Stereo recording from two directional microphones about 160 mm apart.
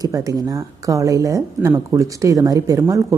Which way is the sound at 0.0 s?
20° right (ahead or behind).